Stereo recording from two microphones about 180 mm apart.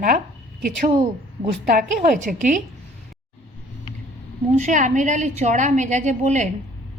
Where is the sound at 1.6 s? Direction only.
45° right (ahead or behind).